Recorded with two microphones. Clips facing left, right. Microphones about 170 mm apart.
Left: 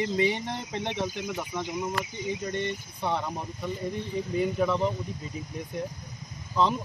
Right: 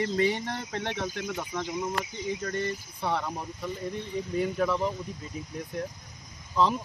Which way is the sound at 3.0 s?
Centre (ahead or behind).